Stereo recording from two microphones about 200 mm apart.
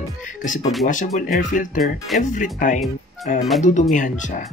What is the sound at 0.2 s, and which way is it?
Music, 40° left (ahead or behind).